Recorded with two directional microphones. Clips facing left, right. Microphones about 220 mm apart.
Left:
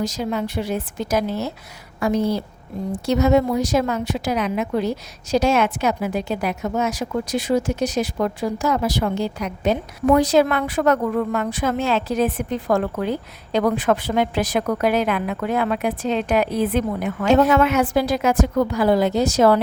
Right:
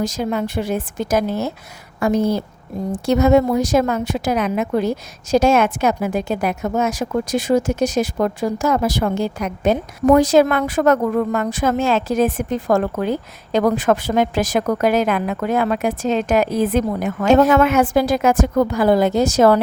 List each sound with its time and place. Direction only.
0.0 s a woman's voice: 50° right (ahead or behind)